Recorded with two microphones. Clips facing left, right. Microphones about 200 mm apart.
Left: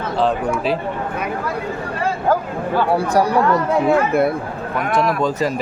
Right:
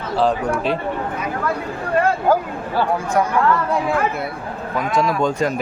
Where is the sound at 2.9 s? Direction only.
35° left (ahead or behind).